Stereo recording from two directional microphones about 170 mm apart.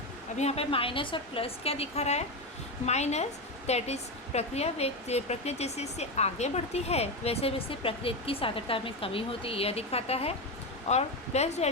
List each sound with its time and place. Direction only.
0.3 s a woman's voice: 40° left (ahead or behind)